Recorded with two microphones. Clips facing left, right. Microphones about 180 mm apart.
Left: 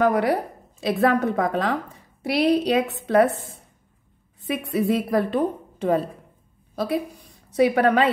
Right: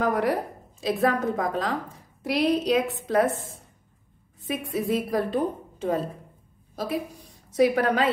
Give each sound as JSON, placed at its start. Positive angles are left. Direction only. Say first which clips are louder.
{"t": 0.0, "sound": "a woman's voice", "louder": "left 4 dB", "side_deg": 65}
{"t": 4.5, "sound": "a woman's voice", "louder": "left 4 dB", "side_deg": 65}
{"t": 6.7, "sound": "a sound", "louder": "left 4 dB", "side_deg": 65}
{"t": 7.5, "sound": "a woman's voice", "louder": "left 3 dB", "side_deg": 60}